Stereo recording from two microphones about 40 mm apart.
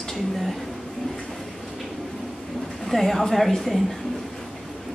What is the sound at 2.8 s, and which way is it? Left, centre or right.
Speech, centre.